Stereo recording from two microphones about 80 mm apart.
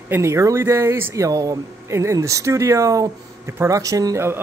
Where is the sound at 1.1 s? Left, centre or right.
Right.